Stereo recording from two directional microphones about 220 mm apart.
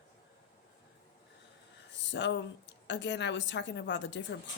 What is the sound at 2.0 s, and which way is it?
A woman's voice, 55° left (ahead or behind).